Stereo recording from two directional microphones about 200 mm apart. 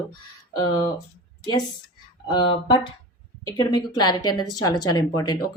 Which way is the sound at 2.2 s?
25° left (ahead or behind).